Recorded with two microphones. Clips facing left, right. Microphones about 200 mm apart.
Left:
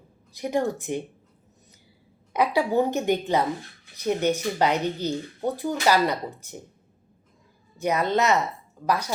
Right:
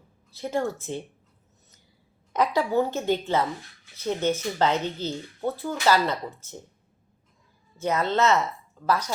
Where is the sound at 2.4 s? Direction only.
15° left (ahead or behind).